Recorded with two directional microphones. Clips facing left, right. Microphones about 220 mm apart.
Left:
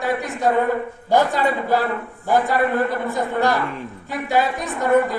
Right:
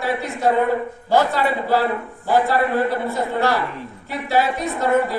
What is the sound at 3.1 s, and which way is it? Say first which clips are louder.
A man's voice: even; 15° left (ahead or behind).